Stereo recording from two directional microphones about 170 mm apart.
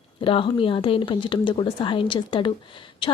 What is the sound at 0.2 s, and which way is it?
A woman's voice, 30° left (ahead or behind).